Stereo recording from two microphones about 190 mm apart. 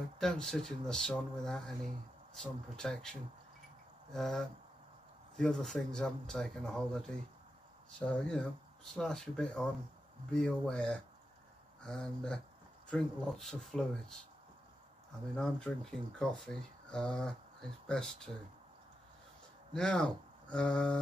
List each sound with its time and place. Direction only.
0.2 s speech: 5° left (ahead or behind)
8.3 s speech: centre (ahead or behind)
15.3 s speech: 5° left (ahead or behind)
19.7 s speech: 5° left (ahead or behind)